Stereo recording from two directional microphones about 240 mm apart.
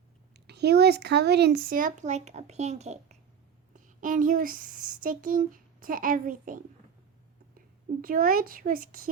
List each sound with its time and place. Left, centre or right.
0.3 s speech: right
8.0 s speech: right